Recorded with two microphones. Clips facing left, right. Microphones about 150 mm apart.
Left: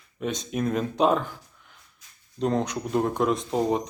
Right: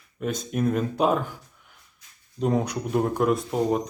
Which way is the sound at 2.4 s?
5° right (ahead or behind).